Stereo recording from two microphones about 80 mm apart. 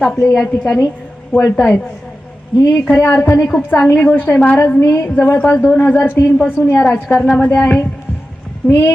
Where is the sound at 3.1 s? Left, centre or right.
Left.